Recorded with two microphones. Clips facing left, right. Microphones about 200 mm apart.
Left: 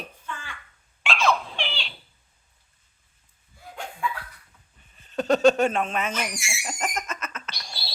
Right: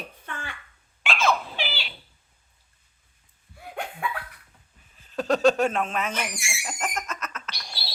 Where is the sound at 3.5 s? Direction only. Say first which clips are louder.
Right 4 dB; 65° right (ahead or behind).